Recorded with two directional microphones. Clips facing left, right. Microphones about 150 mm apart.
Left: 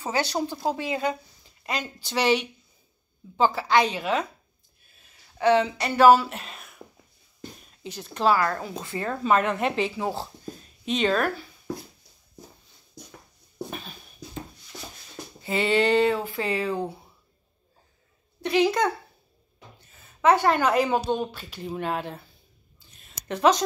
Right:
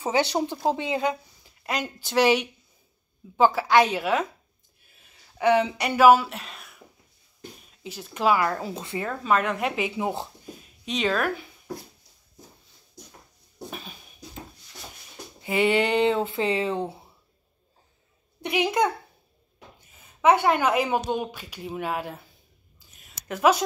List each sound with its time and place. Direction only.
0.0 s speech: 20° right (ahead or behind)
1.7 s speech: 10° right (ahead or behind)
5.4 s speech: 15° right (ahead or behind); by 6.8 s centre (ahead or behind)
7.8 s speech: 5° right (ahead or behind)
9.2 s speech: centre (ahead or behind); by 10.2 s 20° right (ahead or behind)
10.9 s speech: centre (ahead or behind)
13.7 s a sound: 5° right (ahead or behind)
15.4 s speech: 15° right (ahead or behind)
18.4 s speech: 15° right (ahead or behind)
19.9 s a woman's voice: 10° right (ahead or behind)
22.9 s a sound: 5° right (ahead or behind)